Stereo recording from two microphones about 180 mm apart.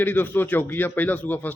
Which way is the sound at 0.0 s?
10° left (ahead or behind).